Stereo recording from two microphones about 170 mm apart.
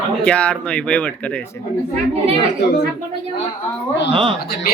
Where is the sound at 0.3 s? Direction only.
5° left (ahead or behind).